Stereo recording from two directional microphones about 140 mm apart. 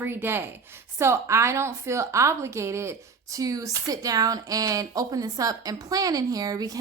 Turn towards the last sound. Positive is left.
turn(degrees=-25)  # may be behind; listen again after turning